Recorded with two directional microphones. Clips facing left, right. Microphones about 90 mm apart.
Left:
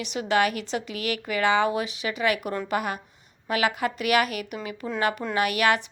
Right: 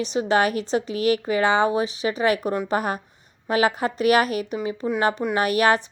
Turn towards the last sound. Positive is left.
turn(degrees=-35)  # may be behind; listen again after turning